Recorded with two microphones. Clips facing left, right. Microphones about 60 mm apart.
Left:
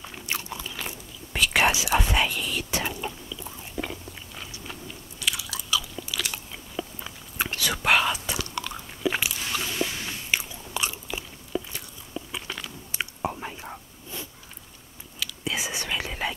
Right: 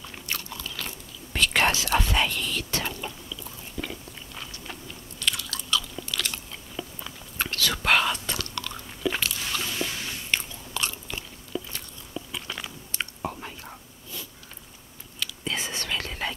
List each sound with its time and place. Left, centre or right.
0.3 s chewing: centre
5.2 s biting: centre
12.9 s chewing: centre
15.1 s whispering: centre